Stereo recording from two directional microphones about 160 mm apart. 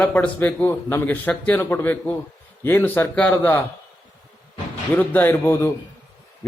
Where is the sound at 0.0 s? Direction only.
10° left (ahead or behind).